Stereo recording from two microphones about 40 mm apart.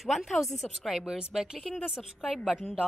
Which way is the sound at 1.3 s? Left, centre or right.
Centre.